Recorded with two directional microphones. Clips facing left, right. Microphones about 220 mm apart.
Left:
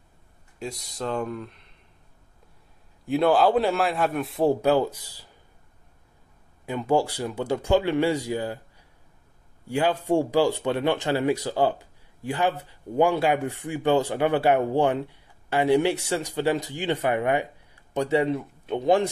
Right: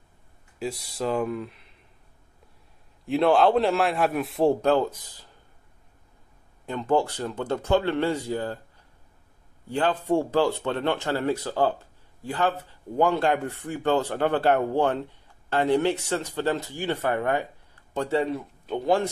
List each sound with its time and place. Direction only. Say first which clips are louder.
0.6 s a man's voice: right 3 dB; 5° right (ahead or behind)
3.1 s a man's voice: even; centre (ahead or behind)
6.6 s speech: left 1 dB; 10° left (ahead or behind)